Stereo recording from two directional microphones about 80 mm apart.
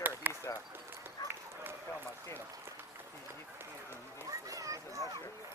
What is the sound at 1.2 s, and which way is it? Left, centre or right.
Run, left.